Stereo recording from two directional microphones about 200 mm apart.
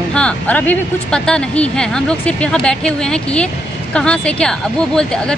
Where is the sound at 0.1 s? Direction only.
5° left (ahead or behind).